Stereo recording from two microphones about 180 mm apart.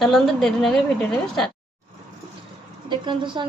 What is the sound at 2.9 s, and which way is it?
Speech, 25° right (ahead or behind).